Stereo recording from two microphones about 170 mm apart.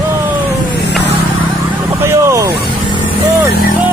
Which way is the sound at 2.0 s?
15° right (ahead or behind).